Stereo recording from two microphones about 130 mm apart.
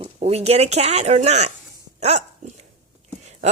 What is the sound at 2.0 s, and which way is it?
Dog, 60° right (ahead or behind).